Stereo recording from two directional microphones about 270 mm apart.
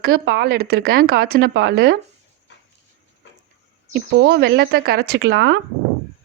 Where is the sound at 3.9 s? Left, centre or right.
Right.